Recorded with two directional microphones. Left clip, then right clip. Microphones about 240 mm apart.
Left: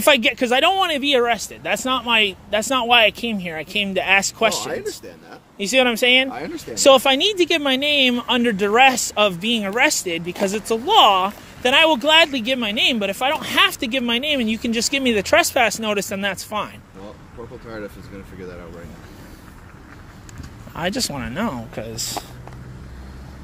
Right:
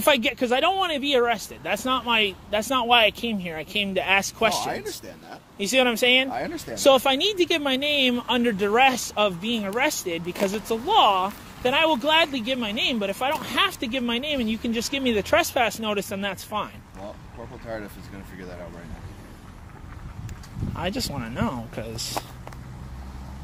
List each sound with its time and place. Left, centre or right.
0.0 s speech: centre
6.3 s speech: right
6.7 s speech: centre
20.7 s speech: centre